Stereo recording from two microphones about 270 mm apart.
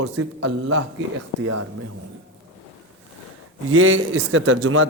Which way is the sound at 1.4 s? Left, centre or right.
Right.